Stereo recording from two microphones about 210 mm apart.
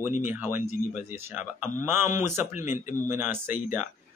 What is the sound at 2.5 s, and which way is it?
Speech, 35° left (ahead or behind).